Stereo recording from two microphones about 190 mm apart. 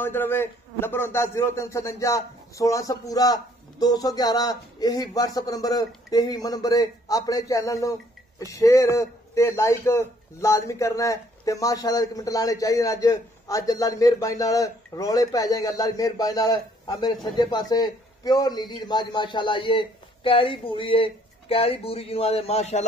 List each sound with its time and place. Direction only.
0.0 s a man's voice: 10° left (ahead or behind); by 22.8 s 35° left (ahead or behind)